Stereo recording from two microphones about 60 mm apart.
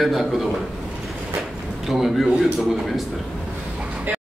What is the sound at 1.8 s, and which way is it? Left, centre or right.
A man's voice, centre.